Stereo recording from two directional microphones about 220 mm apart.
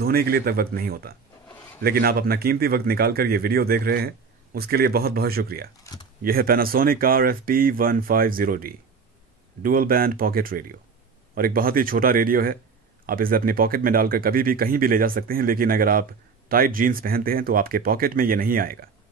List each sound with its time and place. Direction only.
0.0 s speech: 45° right (ahead or behind)